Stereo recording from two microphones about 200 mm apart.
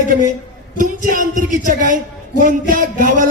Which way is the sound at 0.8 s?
40° right (ahead or behind).